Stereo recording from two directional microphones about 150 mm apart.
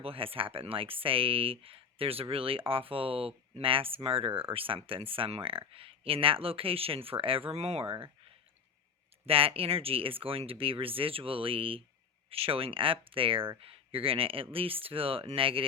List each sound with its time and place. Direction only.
0.0 s speech: 40° right (ahead or behind)
9.2 s speech: 40° right (ahead or behind)